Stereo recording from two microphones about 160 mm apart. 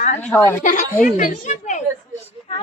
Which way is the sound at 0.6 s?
55° left (ahead or behind).